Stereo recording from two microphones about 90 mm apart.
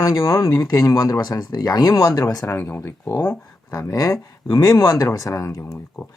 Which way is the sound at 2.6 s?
25° left (ahead or behind).